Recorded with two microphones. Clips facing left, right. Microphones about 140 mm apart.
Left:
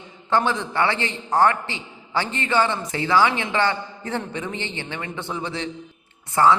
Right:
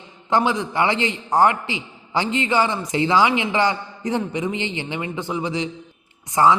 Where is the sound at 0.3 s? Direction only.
15° right (ahead or behind).